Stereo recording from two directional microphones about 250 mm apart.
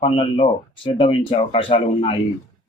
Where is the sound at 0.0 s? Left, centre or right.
Left.